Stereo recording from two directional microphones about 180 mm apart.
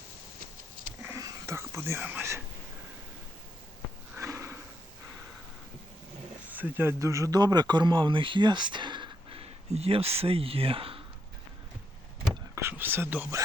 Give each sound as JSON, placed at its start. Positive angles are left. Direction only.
{"t": 1.0, "sound": "whispering", "side_deg": -15}
{"t": 4.1, "sound": "sniff", "side_deg": -15}
{"t": 6.5, "sound": "speech", "side_deg": -10}
{"t": 12.3, "sound": "whispering", "side_deg": -15}